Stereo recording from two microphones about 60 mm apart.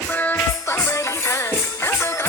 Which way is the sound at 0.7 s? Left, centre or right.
Left.